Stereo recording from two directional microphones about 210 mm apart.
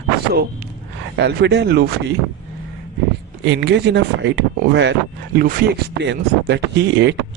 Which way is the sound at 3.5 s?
55° right (ahead or behind).